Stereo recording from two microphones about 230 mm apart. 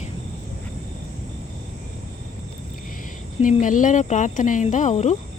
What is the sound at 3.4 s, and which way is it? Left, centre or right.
Speech, left.